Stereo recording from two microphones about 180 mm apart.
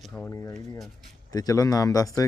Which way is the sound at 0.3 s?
15° left (ahead or behind).